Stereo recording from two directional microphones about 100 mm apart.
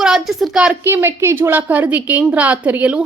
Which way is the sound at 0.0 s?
5° right (ahead or behind).